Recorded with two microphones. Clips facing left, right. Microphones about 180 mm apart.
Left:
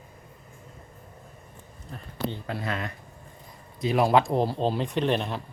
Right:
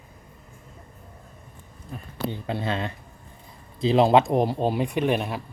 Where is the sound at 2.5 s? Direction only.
25° right (ahead or behind); by 5.4 s 10° right (ahead or behind).